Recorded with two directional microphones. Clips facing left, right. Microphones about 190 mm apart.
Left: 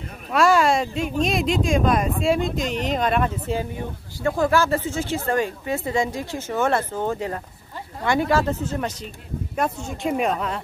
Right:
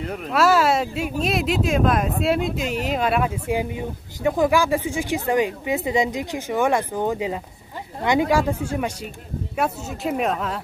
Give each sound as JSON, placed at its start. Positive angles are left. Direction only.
{"t": 0.3, "sound": "speech", "side_deg": -5}